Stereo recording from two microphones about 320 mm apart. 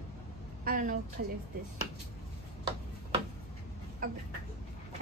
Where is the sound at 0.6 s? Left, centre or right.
Right.